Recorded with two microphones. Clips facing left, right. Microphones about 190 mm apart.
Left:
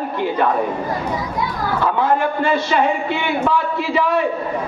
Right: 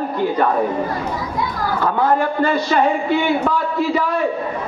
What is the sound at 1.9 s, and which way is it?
A man's voice, 40° right (ahead or behind).